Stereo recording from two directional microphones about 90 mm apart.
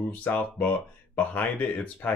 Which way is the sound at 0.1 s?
20° left (ahead or behind).